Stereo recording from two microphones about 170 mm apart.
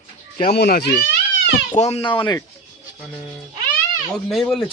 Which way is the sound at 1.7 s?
40° left (ahead or behind).